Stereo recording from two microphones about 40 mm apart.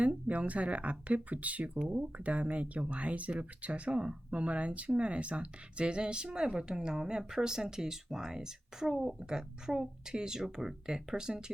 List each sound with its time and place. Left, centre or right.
0.0 s speech: right; by 11.5 s centre